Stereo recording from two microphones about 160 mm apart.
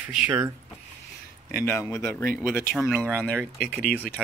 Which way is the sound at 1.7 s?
20° left (ahead or behind).